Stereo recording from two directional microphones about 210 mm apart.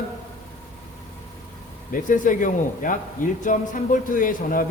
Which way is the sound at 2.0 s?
40° left (ahead or behind).